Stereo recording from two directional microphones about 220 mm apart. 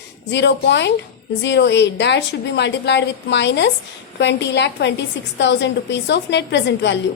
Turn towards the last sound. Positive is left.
turn(degrees=50)  # may be behind; listen again after turning